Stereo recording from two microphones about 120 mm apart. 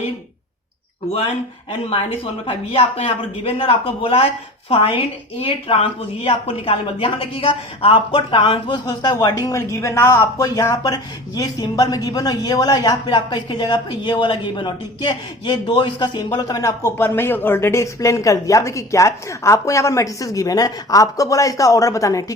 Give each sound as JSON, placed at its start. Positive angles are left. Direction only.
{"t": 2.7, "sound": "a woman's voice", "side_deg": 55}